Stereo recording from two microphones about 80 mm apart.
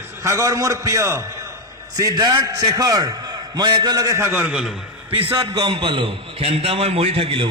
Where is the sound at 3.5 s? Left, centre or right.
Right.